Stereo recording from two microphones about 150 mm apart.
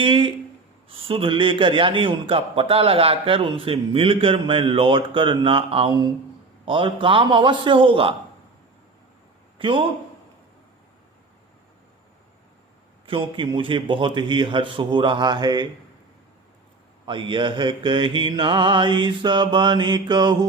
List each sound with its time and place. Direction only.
0.0 s a man's voice: 35° right (ahead or behind)
9.6 s a man's voice: 35° right (ahead or behind)
13.1 s a man's voice: 35° right (ahead or behind)
17.1 s a man's voice: 35° right (ahead or behind)